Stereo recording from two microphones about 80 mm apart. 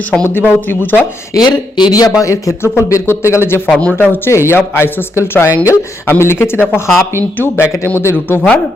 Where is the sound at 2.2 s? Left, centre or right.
Left.